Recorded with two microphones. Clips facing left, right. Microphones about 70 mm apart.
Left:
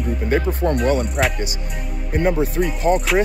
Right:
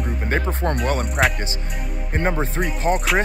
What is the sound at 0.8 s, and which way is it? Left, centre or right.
Speech, right.